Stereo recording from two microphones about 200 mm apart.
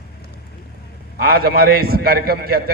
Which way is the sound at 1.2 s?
50° right (ahead or behind).